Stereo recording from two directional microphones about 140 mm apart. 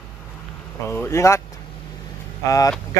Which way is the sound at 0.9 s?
20° left (ahead or behind).